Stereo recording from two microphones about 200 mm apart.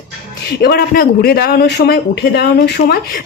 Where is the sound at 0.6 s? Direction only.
50° left (ahead or behind).